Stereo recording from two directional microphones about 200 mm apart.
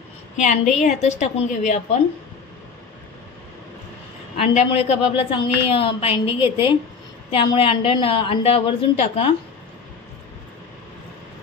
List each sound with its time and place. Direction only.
0.4 s a woman's voice: 35° left (ahead or behind)
4.4 s a woman's voice: 30° left (ahead or behind)